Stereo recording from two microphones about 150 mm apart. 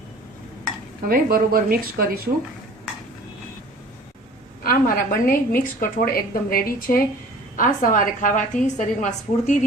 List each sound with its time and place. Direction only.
1.0 s speech: 75° right (ahead or behind)
4.6 s a woman's voice: 75° left (ahead or behind); by 9.6 s 55° left (ahead or behind)